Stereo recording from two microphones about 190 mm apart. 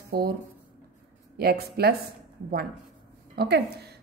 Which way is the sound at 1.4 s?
55° right (ahead or behind).